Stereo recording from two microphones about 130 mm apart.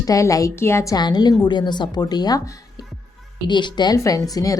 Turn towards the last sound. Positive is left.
turn(degrees=25)  # may be behind; listen again after turning